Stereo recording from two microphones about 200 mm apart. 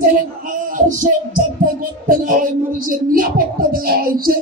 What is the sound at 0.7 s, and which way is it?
Music, 40° right (ahead or behind).